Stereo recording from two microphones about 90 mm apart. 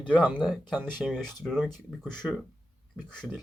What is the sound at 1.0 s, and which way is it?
Speech, centre (ahead or behind).